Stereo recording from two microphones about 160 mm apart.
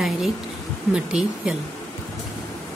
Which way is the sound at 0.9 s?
5° right (ahead or behind).